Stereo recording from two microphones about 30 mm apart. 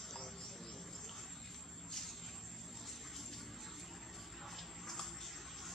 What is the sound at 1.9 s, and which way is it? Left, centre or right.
Vehicle, centre.